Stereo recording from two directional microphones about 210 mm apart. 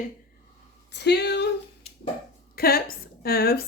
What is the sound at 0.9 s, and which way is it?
Speech, 55° left (ahead or behind).